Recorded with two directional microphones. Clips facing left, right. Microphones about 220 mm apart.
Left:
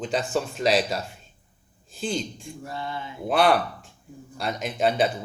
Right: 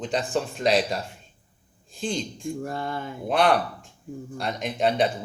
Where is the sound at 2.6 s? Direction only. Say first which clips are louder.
Right 3 dB; 50° right (ahead or behind).